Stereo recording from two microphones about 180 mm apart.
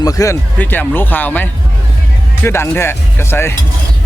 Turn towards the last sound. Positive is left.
turn(degrees=15)  # may be behind; listen again after turning